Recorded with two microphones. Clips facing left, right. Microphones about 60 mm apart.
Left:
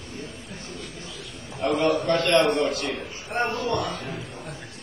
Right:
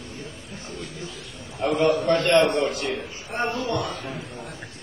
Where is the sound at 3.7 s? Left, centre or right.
Centre.